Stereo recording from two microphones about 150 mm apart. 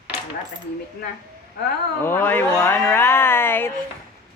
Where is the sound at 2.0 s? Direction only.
15° left (ahead or behind).